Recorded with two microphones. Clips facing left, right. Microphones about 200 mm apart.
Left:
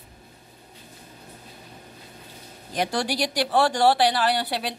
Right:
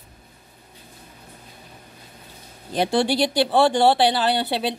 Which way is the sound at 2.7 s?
30° right (ahead or behind).